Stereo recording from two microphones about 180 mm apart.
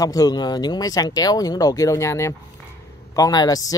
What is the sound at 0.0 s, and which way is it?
Speech, 20° left (ahead or behind).